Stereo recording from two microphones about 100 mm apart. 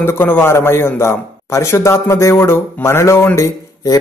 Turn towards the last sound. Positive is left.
turn(degrees=30)  # may be behind; listen again after turning